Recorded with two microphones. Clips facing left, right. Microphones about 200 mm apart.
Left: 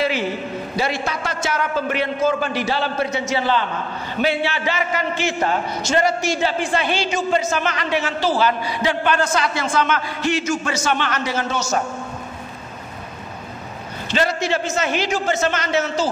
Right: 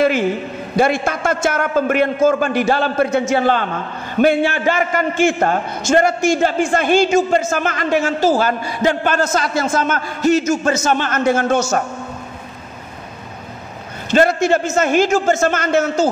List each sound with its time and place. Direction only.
0.7 s a man's voice: 50° right (ahead or behind)
14.1 s a man's voice: 50° right (ahead or behind)